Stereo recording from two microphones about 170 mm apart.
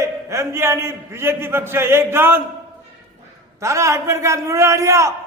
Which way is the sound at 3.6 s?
15° right (ahead or behind).